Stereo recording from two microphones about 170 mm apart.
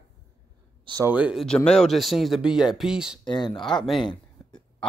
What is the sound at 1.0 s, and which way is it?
Speech, 10° right (ahead or behind).